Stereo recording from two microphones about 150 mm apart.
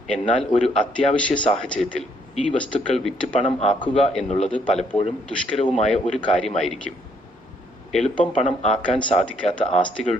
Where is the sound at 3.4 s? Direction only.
45° left (ahead or behind).